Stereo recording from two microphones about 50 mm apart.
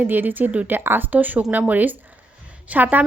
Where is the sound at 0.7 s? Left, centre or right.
Right.